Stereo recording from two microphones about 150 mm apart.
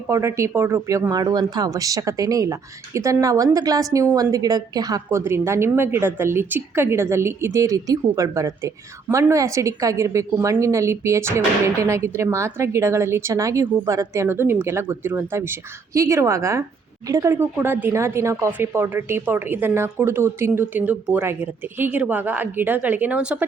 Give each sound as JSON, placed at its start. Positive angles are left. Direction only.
{"t": 0.1, "sound": "speech", "side_deg": -20}